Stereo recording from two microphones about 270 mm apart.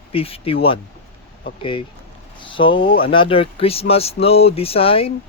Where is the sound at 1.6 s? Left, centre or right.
Centre.